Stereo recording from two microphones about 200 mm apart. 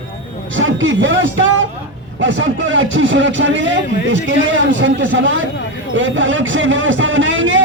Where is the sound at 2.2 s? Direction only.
65° right (ahead or behind).